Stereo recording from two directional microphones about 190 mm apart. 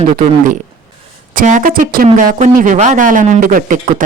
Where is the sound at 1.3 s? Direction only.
45° right (ahead or behind).